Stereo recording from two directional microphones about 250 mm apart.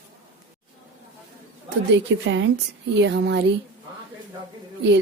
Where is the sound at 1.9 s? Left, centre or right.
Right.